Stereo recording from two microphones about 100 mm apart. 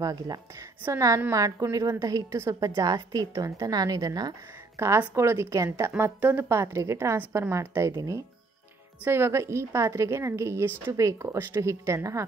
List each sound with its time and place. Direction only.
0.0 s a woman's voice: 40° right (ahead or behind)
4.7 s a woman's voice: 30° right (ahead or behind)
9.0 s a woman's voice: 25° right (ahead or behind)